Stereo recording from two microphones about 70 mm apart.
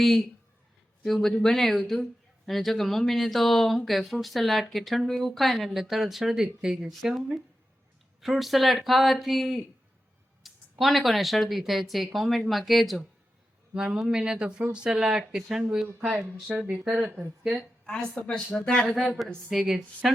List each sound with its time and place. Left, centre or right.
0.0 s speech: centre
8.2 s speech: centre
17.8 s speech: centre
19.5 s speech: centre